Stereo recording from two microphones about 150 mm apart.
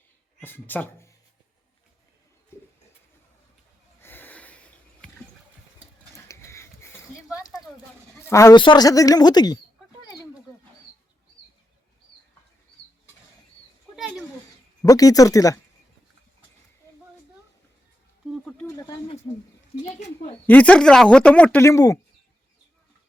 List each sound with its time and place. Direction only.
0.4 s speech: 10° left (ahead or behind)
4.0 s sniff: 15° left (ahead or behind)
6.1 s a sound: 20° left (ahead or behind)
8.3 s speech: 20° left (ahead or behind)
8.5 s speech: 30° left (ahead or behind)
14.8 s speech: 25° left (ahead or behind)
18.4 s speech: 15° left (ahead or behind)
19.8 s speech: 50° left (ahead or behind)
20.5 s speech: 10° left (ahead or behind)
21.6 s speech: 20° left (ahead or behind)